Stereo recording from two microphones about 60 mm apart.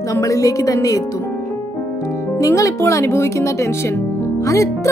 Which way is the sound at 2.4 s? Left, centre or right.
Left.